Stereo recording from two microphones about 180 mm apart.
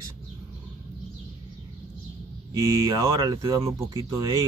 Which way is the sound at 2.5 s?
20° right (ahead or behind).